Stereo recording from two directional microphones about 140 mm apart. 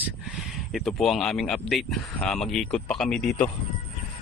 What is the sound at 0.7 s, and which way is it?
Speech, centre (ahead or behind).